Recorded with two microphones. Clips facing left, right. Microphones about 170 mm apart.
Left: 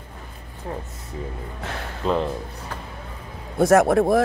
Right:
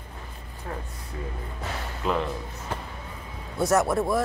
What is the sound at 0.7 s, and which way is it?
Speech, 25° left (ahead or behind).